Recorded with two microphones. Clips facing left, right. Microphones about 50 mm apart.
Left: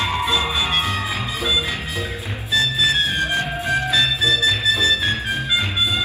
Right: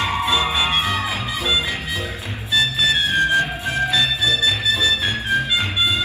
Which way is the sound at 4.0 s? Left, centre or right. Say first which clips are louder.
Left 1 dB; left.